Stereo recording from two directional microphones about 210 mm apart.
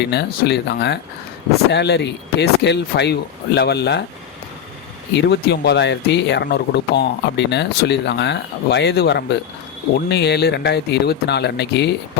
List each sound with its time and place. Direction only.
0.0 s speech: 55° left (ahead or behind)
5.1 s speech: 55° left (ahead or behind)